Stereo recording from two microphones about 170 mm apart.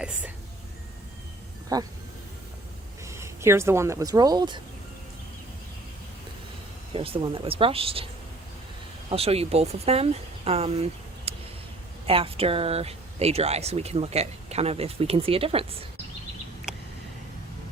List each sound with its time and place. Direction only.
0.0 s speech: 5° right (ahead or behind)
1.7 s speech: 20° right (ahead or behind)
3.0 s speech: 15° right (ahead or behind)
6.9 s speech: 35° right (ahead or behind)
9.0 s speech: 35° right (ahead or behind)
11.3 s a sound: 35° right (ahead or behind)
12.0 s speech: 35° right (ahead or behind)
16.7 s a sound: 5° right (ahead or behind)